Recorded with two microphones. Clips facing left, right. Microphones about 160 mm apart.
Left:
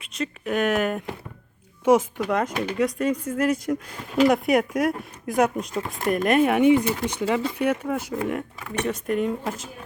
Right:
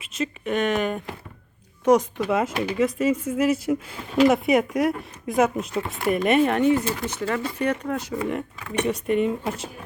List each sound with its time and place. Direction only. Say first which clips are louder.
0.0 s speech: right 1 dB; centre (ahead or behind)